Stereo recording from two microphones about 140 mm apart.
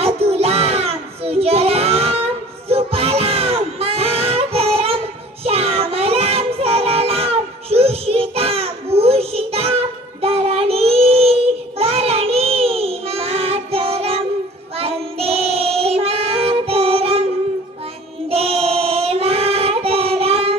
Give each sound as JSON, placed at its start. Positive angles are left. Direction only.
{"t": 0.0, "sound": "child singing", "side_deg": -45}
{"t": 2.7, "sound": "music", "side_deg": -45}
{"t": 10.2, "sound": "child singing", "side_deg": -45}
{"t": 18.3, "sound": "child singing", "side_deg": -45}